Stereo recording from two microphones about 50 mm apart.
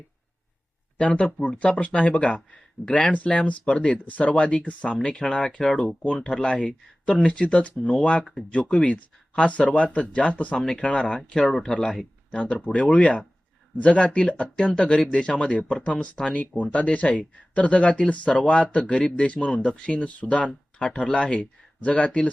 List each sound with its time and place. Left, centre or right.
0.9 s speech: left
10.7 s speech: centre
11.4 s speech: centre
12.3 s speech: left